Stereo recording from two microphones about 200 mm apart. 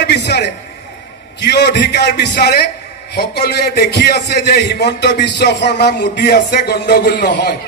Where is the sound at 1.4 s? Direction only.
55° left (ahead or behind).